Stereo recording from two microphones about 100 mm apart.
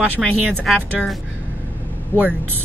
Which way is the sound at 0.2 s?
Centre (ahead or behind).